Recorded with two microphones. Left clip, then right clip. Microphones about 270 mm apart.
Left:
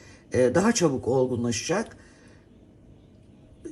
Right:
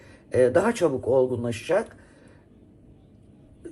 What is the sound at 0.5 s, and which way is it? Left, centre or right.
Speech, left.